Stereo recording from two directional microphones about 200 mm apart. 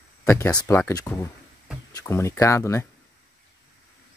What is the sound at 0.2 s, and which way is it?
Speech, 15° left (ahead or behind).